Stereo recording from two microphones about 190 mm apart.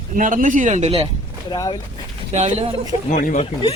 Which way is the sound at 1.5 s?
25° left (ahead or behind).